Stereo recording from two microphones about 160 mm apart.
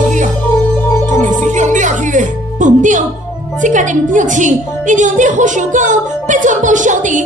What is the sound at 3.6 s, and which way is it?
A woman's voice, 50° right (ahead or behind).